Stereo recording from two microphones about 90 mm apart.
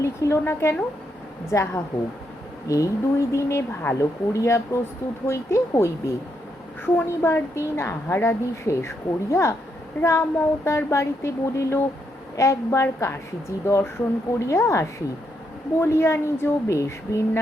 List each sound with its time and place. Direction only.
0.0 s a woman's voice: 35° left (ahead or behind)